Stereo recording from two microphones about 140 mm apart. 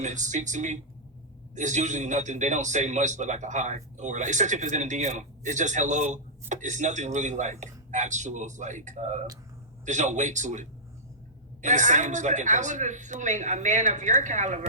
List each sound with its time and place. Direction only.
0.0 s a man's voice: 60° right (ahead or behind)